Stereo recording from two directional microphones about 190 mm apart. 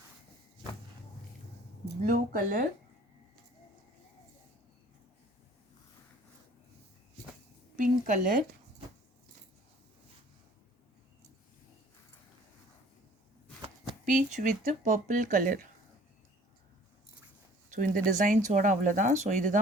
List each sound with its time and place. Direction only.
1.8 s speech: 45° right (ahead or behind)
7.8 s speech: 45° right (ahead or behind)
14.0 s speech: 40° right (ahead or behind)
17.7 s speech: 45° right (ahead or behind)